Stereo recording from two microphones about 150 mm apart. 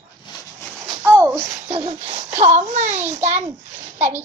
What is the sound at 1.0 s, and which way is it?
Speech, 15° right (ahead or behind).